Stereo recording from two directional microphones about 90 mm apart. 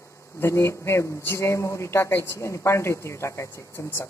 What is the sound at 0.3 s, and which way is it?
Speech, 30° left (ahead or behind).